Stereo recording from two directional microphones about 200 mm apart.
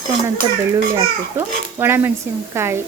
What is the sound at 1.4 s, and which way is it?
Speech, 10° right (ahead or behind).